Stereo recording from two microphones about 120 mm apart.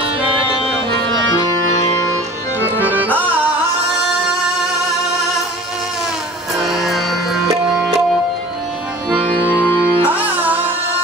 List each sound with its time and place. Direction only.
2.6 s music: 15° right (ahead or behind)
6.6 s music: centre (ahead or behind)
9.5 s music: 20° left (ahead or behind)
9.9 s music: 15° right (ahead or behind)